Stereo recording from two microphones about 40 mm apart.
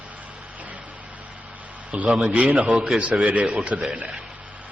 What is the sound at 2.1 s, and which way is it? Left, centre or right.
Speech, centre.